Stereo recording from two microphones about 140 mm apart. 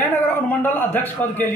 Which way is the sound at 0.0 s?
15° left (ahead or behind).